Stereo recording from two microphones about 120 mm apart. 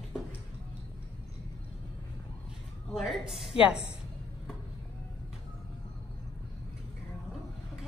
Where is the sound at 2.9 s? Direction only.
5° right (ahead or behind).